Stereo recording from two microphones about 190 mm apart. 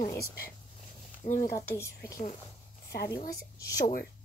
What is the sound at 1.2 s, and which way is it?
Speech, 45° left (ahead or behind).